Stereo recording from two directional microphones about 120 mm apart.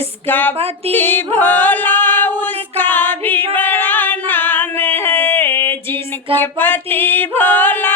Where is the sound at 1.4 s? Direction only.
15° left (ahead or behind).